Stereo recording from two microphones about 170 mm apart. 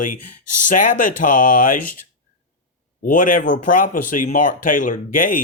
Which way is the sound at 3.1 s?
50° left (ahead or behind).